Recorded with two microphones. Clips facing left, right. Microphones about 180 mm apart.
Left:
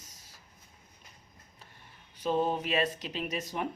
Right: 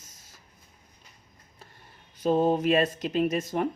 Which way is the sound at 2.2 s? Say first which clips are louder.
Right 7 dB; 45° right (ahead or behind).